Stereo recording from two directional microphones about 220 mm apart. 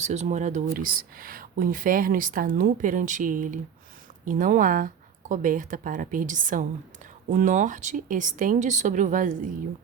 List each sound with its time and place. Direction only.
0.0 s speech: 30° right (ahead or behind)